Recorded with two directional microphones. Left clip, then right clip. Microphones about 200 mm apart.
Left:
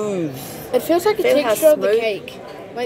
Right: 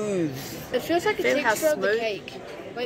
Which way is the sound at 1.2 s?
5° left (ahead or behind).